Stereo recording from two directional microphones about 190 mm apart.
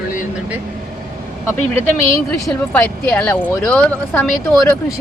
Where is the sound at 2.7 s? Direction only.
5° left (ahead or behind).